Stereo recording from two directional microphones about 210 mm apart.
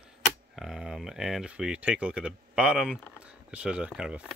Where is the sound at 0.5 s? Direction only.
Centre (ahead or behind).